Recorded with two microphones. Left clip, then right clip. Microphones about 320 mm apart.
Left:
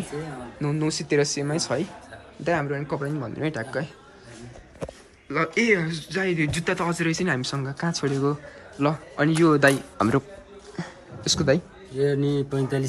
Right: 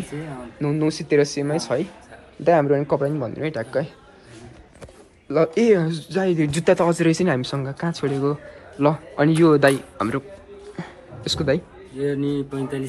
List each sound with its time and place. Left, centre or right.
0.6 s speech: centre
5.3 s speech: centre
10.8 s a sound: centre
12.0 s speech: left